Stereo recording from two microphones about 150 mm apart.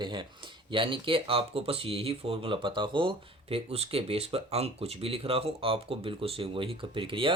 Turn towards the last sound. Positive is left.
turn(degrees=-35)  # may be behind; listen again after turning